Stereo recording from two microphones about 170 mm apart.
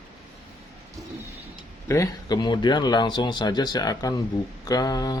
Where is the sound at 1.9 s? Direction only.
20° left (ahead or behind).